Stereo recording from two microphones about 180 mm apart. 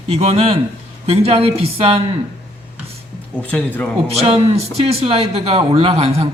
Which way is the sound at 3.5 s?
10° left (ahead or behind).